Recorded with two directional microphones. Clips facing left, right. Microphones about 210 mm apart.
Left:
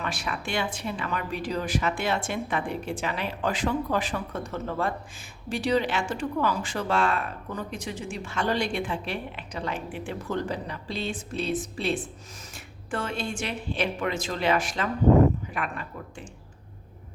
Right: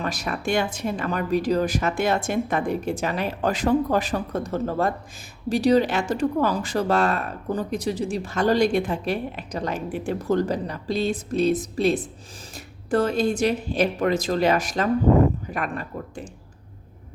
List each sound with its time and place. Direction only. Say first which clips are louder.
0.0 s speech: right 5 dB; 40° right (ahead or behind)